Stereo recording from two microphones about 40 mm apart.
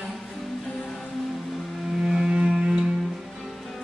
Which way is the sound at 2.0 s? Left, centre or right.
Centre.